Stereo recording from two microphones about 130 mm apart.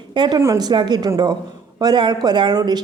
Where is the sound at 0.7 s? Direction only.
35° right (ahead or behind).